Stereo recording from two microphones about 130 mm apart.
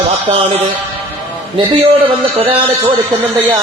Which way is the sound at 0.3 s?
40° right (ahead or behind).